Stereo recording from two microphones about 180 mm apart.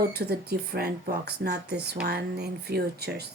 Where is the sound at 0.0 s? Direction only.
60° right (ahead or behind).